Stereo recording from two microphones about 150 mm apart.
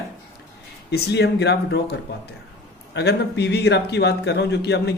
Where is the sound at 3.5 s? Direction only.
90° left.